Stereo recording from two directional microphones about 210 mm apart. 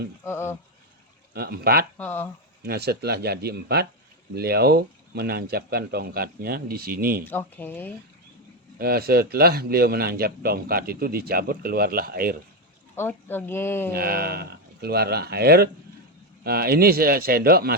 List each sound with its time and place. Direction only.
0.3 s speech: 10° left (ahead or behind)
1.3 s speech: 45° right (ahead or behind)
2.0 s speech: 10° left (ahead or behind)
2.6 s speech: 50° right (ahead or behind)
7.3 s speech: 10° left (ahead or behind)
8.8 s speech: 45° right (ahead or behind)
13.0 s speech: 10° left (ahead or behind)
13.9 s speech: 45° right (ahead or behind)